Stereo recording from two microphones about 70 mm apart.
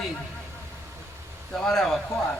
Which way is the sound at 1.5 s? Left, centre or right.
Centre.